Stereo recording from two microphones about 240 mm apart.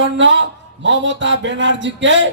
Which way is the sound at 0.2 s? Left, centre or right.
Right.